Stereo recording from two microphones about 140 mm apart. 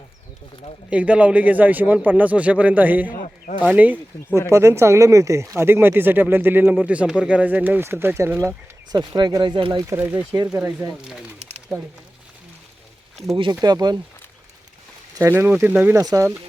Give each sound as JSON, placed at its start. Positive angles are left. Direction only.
{"t": 0.9, "sound": "speech", "side_deg": -10}
{"t": 3.1, "sound": "a sound", "side_deg": 70}
{"t": 3.7, "sound": "speech", "side_deg": -10}
{"t": 8.9, "sound": "speech", "side_deg": -30}
{"t": 9.8, "sound": "speech", "side_deg": -15}
{"t": 11.7, "sound": "speech", "side_deg": 0}
{"t": 13.3, "sound": "speech", "side_deg": -30}
{"t": 15.1, "sound": "speech", "side_deg": -20}